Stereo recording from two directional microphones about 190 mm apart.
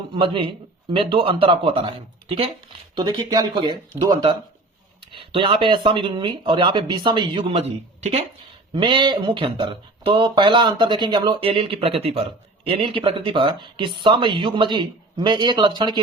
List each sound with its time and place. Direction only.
0.1 s speech: 25° right (ahead or behind)
5.1 s speech: 25° right (ahead or behind)